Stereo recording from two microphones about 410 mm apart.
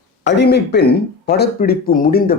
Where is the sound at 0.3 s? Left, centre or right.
Left.